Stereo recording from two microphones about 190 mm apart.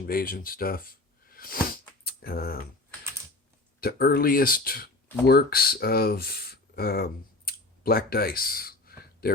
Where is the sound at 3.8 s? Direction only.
50° left (ahead or behind).